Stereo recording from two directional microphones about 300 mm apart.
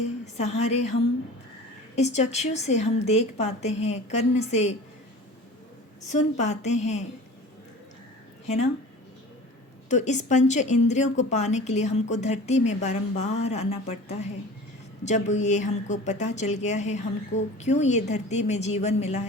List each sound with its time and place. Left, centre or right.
0.3 s speech: left
2.0 s speech: left
6.1 s speech: left
9.9 s speech: left